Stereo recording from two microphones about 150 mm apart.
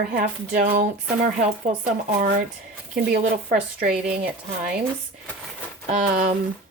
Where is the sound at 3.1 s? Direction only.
60° right (ahead or behind).